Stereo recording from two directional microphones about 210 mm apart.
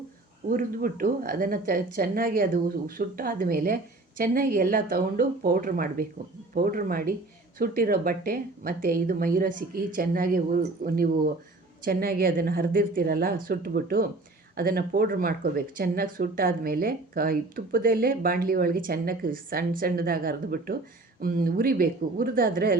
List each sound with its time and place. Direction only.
0.5 s speech: 40° right (ahead or behind)